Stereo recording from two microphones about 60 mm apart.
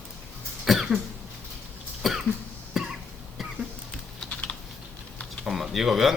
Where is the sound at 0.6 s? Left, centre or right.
Centre.